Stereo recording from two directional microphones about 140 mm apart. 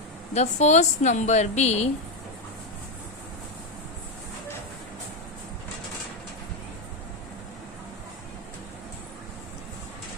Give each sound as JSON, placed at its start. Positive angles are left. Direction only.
{"t": 0.3, "sound": "a woman's voice", "side_deg": 55}